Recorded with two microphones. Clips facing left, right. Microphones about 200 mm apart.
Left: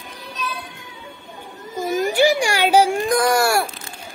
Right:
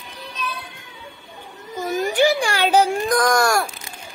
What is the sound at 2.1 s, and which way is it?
A child's voice, 10° left (ahead or behind).